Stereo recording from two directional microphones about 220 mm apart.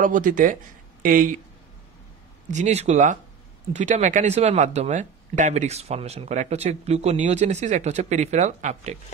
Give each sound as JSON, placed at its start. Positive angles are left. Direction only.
{"t": 0.0, "sound": "speech", "side_deg": -35}
{"t": 2.5, "sound": "speech", "side_deg": -30}